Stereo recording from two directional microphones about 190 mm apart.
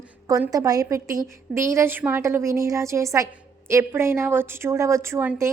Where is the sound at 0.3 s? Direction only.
15° right (ahead or behind).